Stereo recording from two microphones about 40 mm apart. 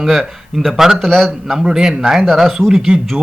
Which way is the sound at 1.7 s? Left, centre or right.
Centre.